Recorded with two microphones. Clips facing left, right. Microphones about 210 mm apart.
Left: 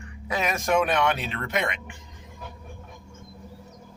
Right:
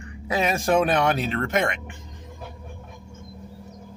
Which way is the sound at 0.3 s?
30° right (ahead or behind).